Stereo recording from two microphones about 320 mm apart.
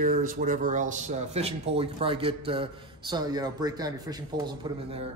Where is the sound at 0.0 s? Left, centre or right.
Right.